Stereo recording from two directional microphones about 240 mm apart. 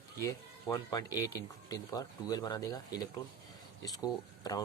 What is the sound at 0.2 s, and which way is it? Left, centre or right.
Speech, centre.